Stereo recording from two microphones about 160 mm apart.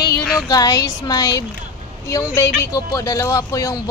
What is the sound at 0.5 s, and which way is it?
Speech, 20° left (ahead or behind).